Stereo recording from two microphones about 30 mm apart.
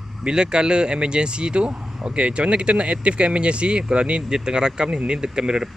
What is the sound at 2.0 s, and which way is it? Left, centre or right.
Speech, right.